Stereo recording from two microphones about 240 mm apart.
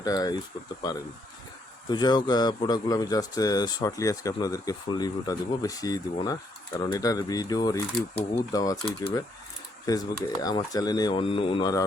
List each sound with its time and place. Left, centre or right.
0.0 s speech: centre